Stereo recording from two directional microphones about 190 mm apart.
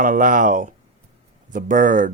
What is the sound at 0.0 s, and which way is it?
Speech, 45° right (ahead or behind).